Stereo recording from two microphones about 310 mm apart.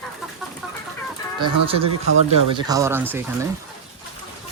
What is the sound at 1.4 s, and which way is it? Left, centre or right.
Speech, centre.